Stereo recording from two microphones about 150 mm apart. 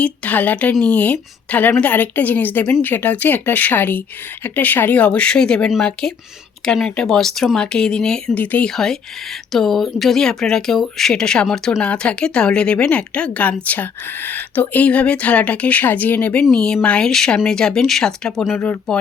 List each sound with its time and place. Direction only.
0.0 s a woman's voice: 10° left (ahead or behind)